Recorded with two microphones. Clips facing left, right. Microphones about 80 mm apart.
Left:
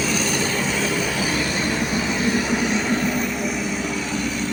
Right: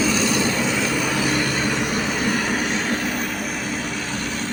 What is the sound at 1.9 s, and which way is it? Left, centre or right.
Vehicle, right.